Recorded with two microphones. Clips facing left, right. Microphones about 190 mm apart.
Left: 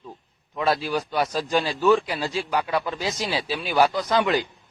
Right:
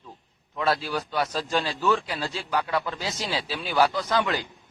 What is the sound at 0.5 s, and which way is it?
A man's voice, 15° left (ahead or behind).